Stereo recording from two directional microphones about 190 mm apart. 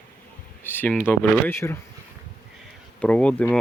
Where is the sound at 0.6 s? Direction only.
10° left (ahead or behind).